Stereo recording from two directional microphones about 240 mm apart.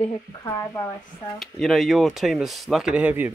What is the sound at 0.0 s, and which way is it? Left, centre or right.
Speech, centre.